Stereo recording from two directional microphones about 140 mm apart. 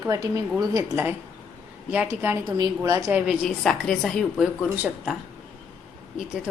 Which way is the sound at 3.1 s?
10° right (ahead or behind).